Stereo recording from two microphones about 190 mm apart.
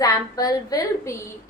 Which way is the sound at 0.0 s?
20° left (ahead or behind).